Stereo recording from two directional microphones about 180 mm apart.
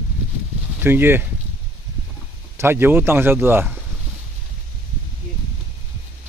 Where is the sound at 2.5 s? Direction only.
10° right (ahead or behind).